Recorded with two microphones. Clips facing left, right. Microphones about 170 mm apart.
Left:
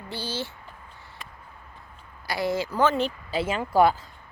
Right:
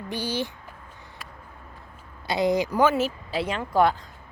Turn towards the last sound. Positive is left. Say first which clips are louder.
# left 1 dB
turn(degrees=5)  # may be behind; listen again after turning